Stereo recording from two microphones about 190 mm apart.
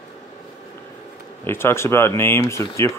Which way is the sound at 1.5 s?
15° left (ahead or behind).